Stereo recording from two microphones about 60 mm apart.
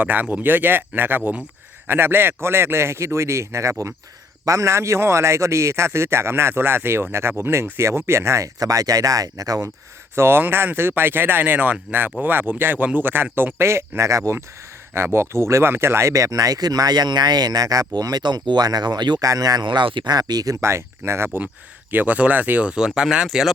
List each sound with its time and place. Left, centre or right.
0.0 s a man's voice: right
8.5 s speech: right
10.2 s a man's voice: right
14.9 s a man's voice: right
20.6 s a man's voice: right
21.9 s speech: right
23.0 s speech: centre